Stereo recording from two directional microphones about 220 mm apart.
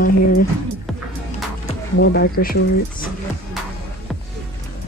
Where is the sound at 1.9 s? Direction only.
50° left (ahead or behind).